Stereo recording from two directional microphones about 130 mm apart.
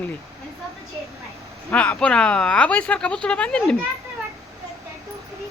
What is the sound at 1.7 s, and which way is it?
Speech, 10° left (ahead or behind).